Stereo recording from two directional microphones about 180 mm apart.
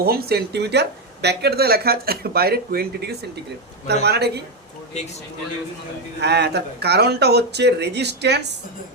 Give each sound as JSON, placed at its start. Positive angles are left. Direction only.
{"t": 0.0, "sound": "speech", "side_deg": -60}
{"t": 6.1, "sound": "speech", "side_deg": -70}